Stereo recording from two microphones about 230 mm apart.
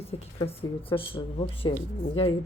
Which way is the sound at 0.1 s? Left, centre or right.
Left.